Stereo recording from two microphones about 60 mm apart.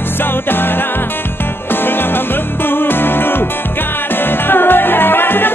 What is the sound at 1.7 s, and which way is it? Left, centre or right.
Music, left.